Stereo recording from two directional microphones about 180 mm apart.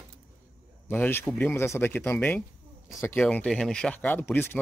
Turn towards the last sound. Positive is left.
turn(degrees=10)  # may be behind; listen again after turning